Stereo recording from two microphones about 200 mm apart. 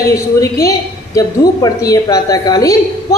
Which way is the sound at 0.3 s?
15° left (ahead or behind).